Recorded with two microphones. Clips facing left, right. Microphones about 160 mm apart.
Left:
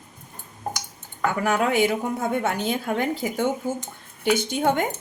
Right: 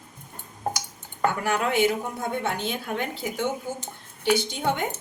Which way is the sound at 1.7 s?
45° left (ahead or behind).